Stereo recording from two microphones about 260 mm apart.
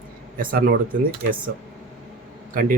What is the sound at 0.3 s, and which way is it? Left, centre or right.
Speech, right.